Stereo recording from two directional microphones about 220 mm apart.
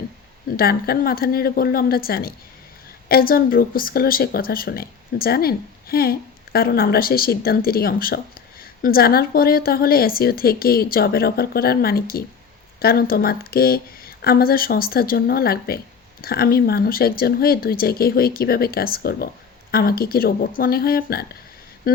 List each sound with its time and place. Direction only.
0.5 s speech: 45° left (ahead or behind)